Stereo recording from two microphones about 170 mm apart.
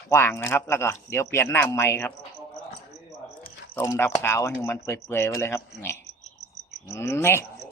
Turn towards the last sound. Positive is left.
turn(degrees=15)  # may be behind; listen again after turning